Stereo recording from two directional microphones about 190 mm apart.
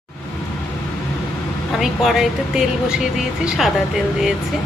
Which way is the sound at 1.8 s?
Centre (ahead or behind).